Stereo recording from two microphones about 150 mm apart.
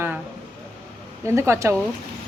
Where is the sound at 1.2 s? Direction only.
20° right (ahead or behind).